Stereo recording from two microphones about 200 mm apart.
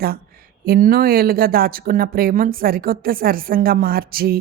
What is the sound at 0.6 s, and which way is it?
Speech, 50° right (ahead or behind).